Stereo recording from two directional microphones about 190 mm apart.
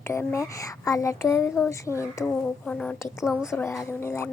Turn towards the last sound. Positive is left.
turn(degrees=15)  # may be behind; listen again after turning